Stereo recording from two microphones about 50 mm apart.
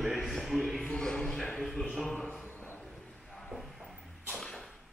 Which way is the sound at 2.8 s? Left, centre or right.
Centre.